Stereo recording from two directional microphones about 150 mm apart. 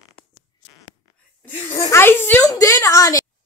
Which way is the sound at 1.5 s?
15° left (ahead or behind).